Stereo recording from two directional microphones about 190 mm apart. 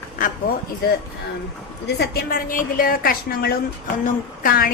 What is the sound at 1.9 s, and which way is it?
A woman's voice, 55° left (ahead or behind).